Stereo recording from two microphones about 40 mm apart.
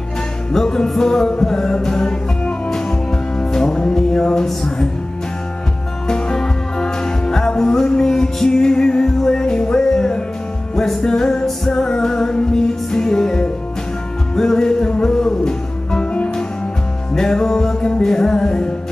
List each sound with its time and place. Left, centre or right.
0.5 s music: centre
6.0 s music: left
17.1 s music: centre